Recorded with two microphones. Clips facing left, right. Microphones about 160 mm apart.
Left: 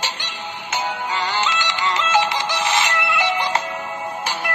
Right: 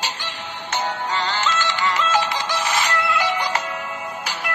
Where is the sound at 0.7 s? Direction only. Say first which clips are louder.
Even; 10° left (ahead or behind).